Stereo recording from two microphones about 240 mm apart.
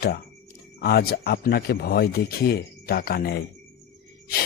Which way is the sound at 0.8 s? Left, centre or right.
Left.